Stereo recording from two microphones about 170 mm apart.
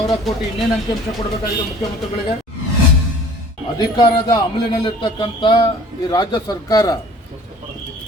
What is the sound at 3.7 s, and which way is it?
A man's voice, 25° left (ahead or behind).